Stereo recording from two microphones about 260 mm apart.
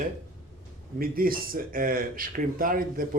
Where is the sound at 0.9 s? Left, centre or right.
Right.